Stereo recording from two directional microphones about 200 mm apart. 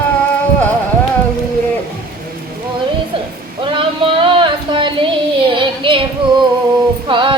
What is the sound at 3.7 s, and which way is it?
Child singing, 25° right (ahead or behind).